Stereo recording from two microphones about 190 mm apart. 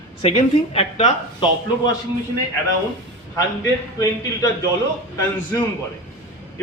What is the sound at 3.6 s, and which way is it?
Speech, 15° left (ahead or behind).